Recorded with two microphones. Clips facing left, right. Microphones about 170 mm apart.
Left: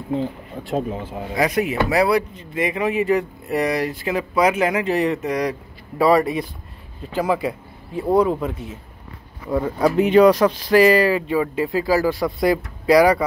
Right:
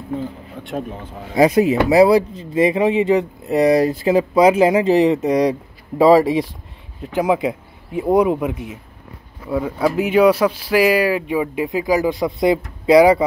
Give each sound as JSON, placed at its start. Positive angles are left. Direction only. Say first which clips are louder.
{"t": 1.3, "sound": "speech", "louder": "right 7 dB", "side_deg": -30}
{"t": 9.5, "sound": "speech", "louder": "even", "side_deg": -5}